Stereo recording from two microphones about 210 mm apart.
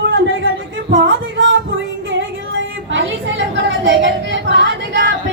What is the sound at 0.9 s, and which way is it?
Music, 60° right (ahead or behind).